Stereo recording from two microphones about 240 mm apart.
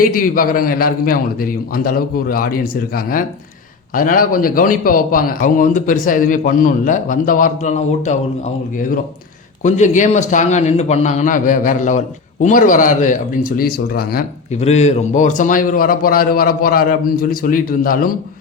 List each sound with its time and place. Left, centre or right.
0.0 s a man's voice: left
9.6 s a man's voice: left